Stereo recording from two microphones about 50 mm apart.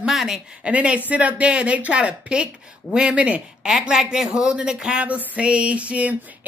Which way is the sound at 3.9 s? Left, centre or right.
Centre.